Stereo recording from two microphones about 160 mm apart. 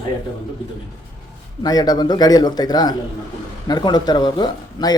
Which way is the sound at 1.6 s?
25° left (ahead or behind).